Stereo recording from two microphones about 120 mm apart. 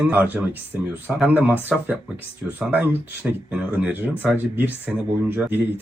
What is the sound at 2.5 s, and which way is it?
Speech, 15° right (ahead or behind).